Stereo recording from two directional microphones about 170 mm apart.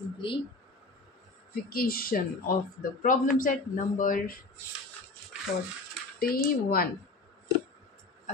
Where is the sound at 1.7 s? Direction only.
60° left (ahead or behind).